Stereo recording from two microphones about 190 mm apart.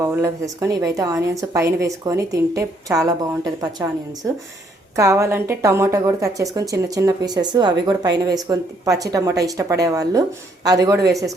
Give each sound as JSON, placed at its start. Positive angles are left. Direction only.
{"t": 0.0, "sound": "a woman's voice", "side_deg": -15}
{"t": 4.9, "sound": "a woman's voice", "side_deg": -15}